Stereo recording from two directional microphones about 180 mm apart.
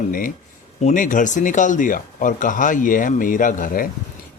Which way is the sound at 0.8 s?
45° left (ahead or behind).